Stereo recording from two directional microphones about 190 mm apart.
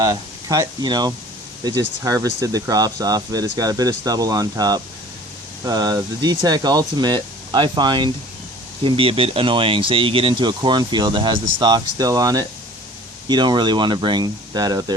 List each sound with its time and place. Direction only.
0.0 s speech: 20° right (ahead or behind)